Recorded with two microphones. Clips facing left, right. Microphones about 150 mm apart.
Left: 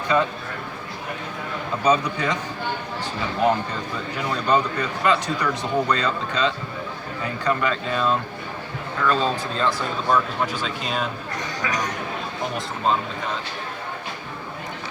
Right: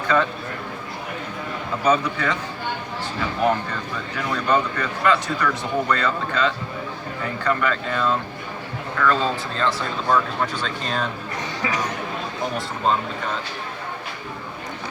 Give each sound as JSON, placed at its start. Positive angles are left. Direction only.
{"t": 0.1, "sound": "a man's voice", "side_deg": 15}
{"t": 1.8, "sound": "a man's voice", "side_deg": 15}
{"t": 4.2, "sound": "a man's voice", "side_deg": 15}
{"t": 10.1, "sound": "a man's voice", "side_deg": 5}